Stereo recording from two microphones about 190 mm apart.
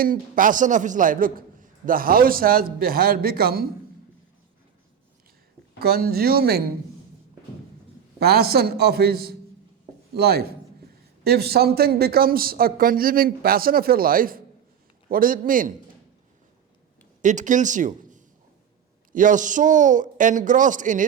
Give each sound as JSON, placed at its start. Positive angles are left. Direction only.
{"t": 0.0, "sound": "a man's voice", "side_deg": -45}
{"t": 5.8, "sound": "a man's voice", "side_deg": -55}
{"t": 8.2, "sound": "a man's voice", "side_deg": -55}
{"t": 17.2, "sound": "a man's voice", "side_deg": -40}